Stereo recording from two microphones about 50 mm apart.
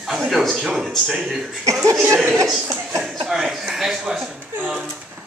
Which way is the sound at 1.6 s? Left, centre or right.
Right.